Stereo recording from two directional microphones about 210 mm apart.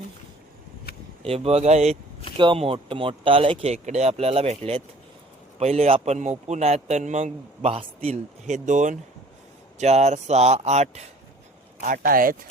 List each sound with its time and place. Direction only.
1.2 s a man's voice: 30° right (ahead or behind)
11.8 s speech: 45° right (ahead or behind)